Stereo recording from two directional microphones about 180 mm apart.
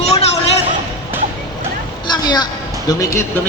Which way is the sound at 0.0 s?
35° left (ahead or behind).